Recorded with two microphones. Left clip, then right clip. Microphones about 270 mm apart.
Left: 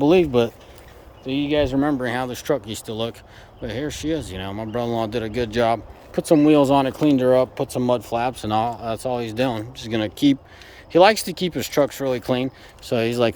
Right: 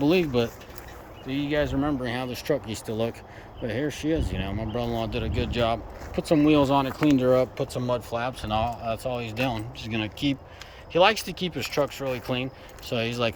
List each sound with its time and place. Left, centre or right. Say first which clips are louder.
0.0 s speech: left 6 dB; centre